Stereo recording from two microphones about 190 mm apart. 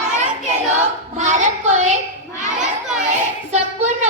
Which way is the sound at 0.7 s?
40° right (ahead or behind).